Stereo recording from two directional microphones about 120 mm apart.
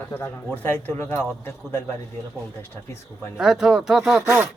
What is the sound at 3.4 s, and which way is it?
Speech, 5° right (ahead or behind).